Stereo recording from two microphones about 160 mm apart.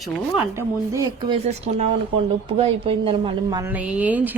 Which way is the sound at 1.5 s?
40° right (ahead or behind).